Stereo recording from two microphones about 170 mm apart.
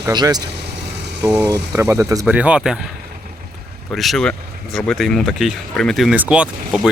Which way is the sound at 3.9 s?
Centre (ahead or behind).